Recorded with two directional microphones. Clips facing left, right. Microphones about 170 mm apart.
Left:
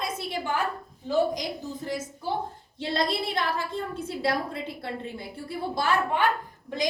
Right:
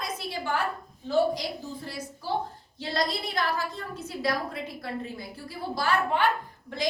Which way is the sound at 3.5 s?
30° left (ahead or behind).